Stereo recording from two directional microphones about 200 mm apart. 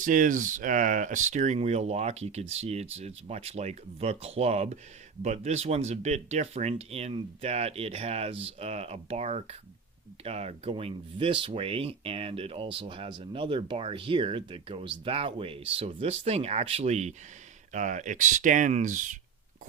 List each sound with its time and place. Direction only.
0.0 s speech: 40° right (ahead or behind)